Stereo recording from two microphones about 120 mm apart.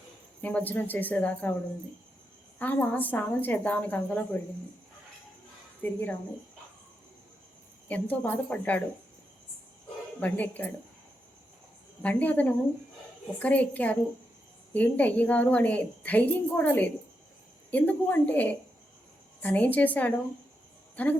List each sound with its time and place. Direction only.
0.4 s a woman's voice: 15° left (ahead or behind)
2.6 s a woman's voice: 15° left (ahead or behind)
5.8 s a woman's voice: 15° left (ahead or behind)
7.9 s a woman's voice: 15° left (ahead or behind)
10.2 s a woman's voice: 15° left (ahead or behind)
12.0 s a woman's voice: 10° left (ahead or behind)